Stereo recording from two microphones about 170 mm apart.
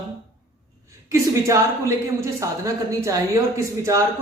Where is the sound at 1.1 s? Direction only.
15° right (ahead or behind).